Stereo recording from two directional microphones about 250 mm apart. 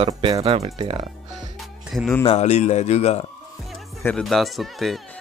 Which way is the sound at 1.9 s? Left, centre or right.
Centre.